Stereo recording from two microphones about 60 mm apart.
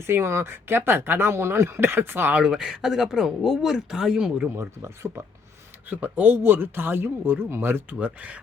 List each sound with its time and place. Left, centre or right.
0.1 s speech: right
2.3 s speech: centre
4.5 s speech: right
5.9 s speech: right
7.9 s speech: right